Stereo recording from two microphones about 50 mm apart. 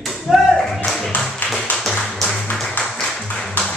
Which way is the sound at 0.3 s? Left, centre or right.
Centre.